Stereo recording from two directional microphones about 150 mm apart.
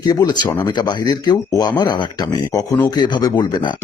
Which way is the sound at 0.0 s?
30° left (ahead or behind).